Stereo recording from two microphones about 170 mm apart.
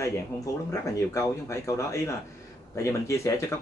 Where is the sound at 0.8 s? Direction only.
20° left (ahead or behind).